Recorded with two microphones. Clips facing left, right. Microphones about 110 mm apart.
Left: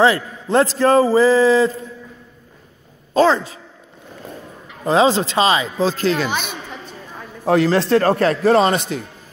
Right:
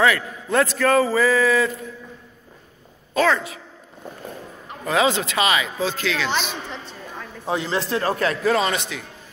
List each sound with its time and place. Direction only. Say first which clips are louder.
0.0 s a man's voice: left 4 dB; 30° left (ahead or behind)
3.2 s speech: left 5 dB; 30° left (ahead or behind)
4.8 s speech: left 5 dB; 30° left (ahead or behind)
7.4 s a man's voice: left 9 dB; 75° left (ahead or behind)
8.0 s speech: left 6 dB; 45° left (ahead or behind)